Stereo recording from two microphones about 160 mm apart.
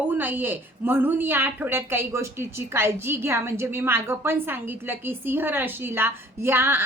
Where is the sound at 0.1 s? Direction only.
10° right (ahead or behind).